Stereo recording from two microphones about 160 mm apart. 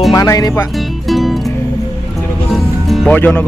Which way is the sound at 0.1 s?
20° left (ahead or behind).